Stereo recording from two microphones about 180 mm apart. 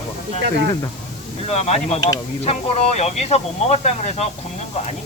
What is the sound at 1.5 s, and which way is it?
Speech, 35° left (ahead or behind).